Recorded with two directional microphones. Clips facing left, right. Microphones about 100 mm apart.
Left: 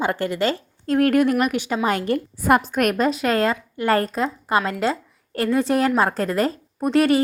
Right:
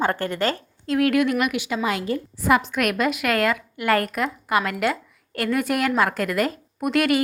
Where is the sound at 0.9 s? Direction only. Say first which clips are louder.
Left 2 dB; 40° left (ahead or behind).